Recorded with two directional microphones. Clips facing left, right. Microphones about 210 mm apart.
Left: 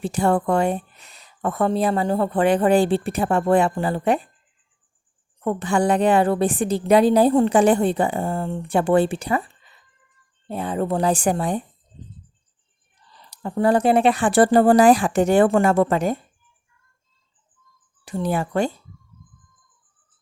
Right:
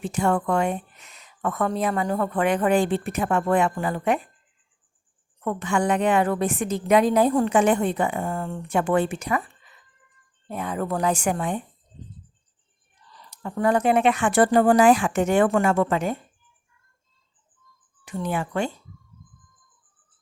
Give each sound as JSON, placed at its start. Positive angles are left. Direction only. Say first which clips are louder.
{"t": 0.0, "sound": "a woman's voice", "louder": "left 3 dB", "side_deg": 35}
{"t": 5.4, "sound": "a woman's voice", "louder": "left 3 dB", "side_deg": 30}
{"t": 13.1, "sound": "a woman's voice", "louder": "left 4 dB", "side_deg": 30}
{"t": 18.0, "sound": "a woman's voice", "louder": "left 4 dB", "side_deg": 35}